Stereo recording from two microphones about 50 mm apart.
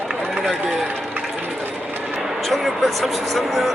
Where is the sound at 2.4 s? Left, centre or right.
Centre.